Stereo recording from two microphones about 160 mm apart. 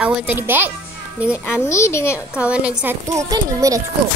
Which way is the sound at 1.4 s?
15° left (ahead or behind).